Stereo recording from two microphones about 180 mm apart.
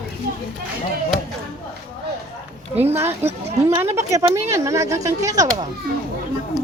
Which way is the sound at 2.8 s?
10° right (ahead or behind).